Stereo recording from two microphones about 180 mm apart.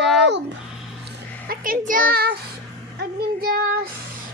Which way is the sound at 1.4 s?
50° right (ahead or behind).